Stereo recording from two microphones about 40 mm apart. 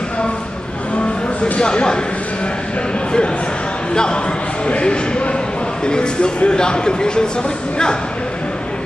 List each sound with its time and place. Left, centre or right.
1.6 s speech: left
3.9 s speech: left